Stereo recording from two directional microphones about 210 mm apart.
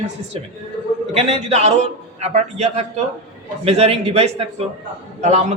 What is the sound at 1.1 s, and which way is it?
A man's voice, 30° right (ahead or behind).